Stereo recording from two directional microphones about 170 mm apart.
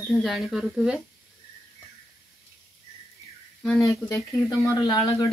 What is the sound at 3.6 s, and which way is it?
Speech, centre (ahead or behind).